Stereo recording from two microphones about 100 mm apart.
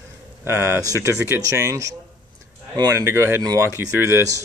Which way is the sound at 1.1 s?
20° right (ahead or behind).